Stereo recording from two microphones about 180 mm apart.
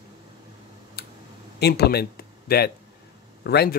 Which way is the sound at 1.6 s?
65° left (ahead or behind).